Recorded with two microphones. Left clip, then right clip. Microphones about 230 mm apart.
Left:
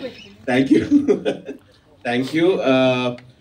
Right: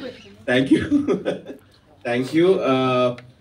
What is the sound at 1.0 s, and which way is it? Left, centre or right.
A man's voice, left.